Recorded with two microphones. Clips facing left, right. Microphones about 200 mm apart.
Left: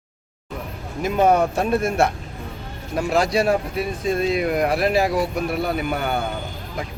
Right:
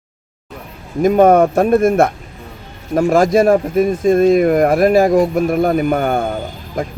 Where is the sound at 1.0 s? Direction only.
50° right (ahead or behind).